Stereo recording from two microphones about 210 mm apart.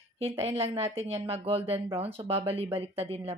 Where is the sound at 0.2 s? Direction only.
30° right (ahead or behind).